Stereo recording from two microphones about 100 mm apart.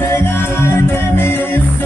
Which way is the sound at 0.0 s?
20° left (ahead or behind).